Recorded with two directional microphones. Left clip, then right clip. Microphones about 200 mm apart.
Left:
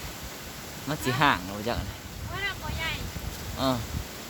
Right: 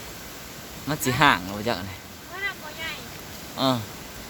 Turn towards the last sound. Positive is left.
turn(degrees=-30)  # may be behind; listen again after turning